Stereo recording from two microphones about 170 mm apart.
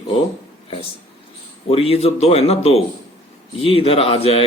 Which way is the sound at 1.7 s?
35° left (ahead or behind).